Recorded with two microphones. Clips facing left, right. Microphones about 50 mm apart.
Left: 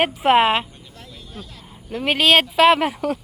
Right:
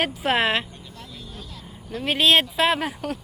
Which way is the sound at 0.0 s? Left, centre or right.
Left.